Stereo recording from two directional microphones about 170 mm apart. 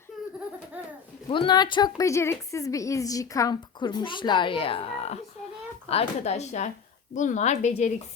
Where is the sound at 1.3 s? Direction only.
25° left (ahead or behind).